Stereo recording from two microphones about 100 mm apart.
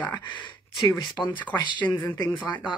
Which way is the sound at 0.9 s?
50° left (ahead or behind).